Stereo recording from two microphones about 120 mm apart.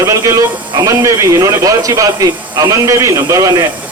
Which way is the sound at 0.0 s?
25° right (ahead or behind).